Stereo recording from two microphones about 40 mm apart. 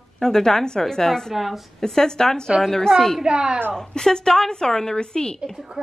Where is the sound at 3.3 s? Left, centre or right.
Right.